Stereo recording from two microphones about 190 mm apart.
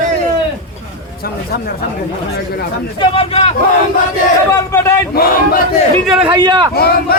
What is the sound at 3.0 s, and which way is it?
Speech, 30° left (ahead or behind).